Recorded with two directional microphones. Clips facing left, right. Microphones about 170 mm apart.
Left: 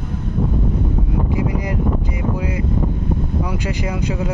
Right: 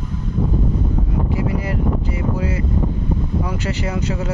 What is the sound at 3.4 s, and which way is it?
Speech, 15° left (ahead or behind).